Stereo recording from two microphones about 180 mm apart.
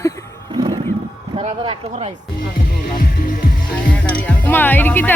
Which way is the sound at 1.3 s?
30° right (ahead or behind).